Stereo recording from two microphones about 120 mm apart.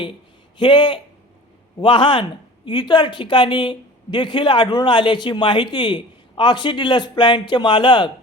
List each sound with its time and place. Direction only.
0.6 s a woman's voice: 40° left (ahead or behind)